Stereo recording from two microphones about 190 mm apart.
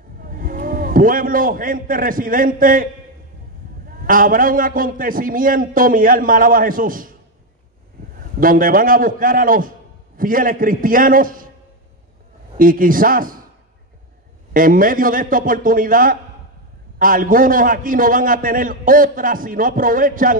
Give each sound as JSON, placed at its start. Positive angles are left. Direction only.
{"t": 0.2, "sound": "a man's voice", "side_deg": -50}
{"t": 4.0, "sound": "a man's voice", "side_deg": -45}
{"t": 8.4, "sound": "a man's voice", "side_deg": -45}
{"t": 12.5, "sound": "a man's voice", "side_deg": -45}
{"t": 14.5, "sound": "a man's voice", "side_deg": -45}